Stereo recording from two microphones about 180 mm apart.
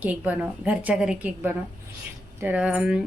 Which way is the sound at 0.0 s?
10° right (ahead or behind).